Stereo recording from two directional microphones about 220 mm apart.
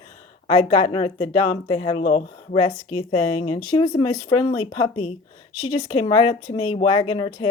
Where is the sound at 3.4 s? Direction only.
25° left (ahead or behind).